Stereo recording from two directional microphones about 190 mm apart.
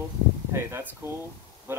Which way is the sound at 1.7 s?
10° right (ahead or behind).